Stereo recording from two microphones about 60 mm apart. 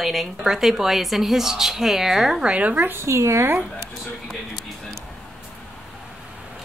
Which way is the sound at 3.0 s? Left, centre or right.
Right.